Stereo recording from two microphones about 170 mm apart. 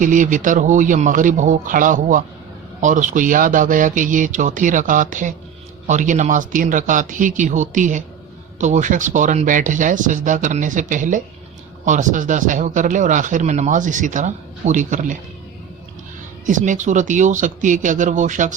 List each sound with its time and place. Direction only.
0.0 s speech: 50° right (ahead or behind)
16.5 s speech: 45° right (ahead or behind)